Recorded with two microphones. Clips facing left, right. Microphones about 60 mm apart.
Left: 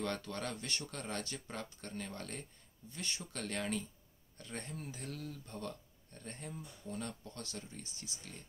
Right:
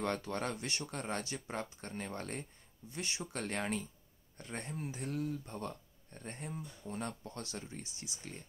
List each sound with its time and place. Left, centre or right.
0.0 s speech: right
2.9 s speech: centre